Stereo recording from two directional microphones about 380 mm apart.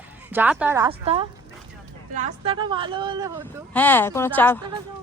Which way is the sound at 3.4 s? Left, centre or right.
Centre.